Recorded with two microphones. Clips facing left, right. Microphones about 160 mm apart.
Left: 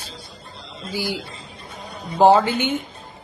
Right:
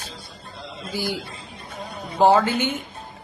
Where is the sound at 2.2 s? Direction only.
15° left (ahead or behind).